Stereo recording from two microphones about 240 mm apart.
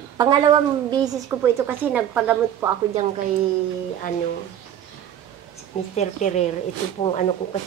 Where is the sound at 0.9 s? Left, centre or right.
Centre.